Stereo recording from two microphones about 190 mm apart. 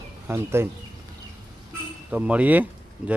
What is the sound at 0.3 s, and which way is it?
Speech, 15° right (ahead or behind).